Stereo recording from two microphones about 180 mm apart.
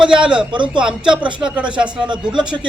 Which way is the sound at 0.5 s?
25° right (ahead or behind).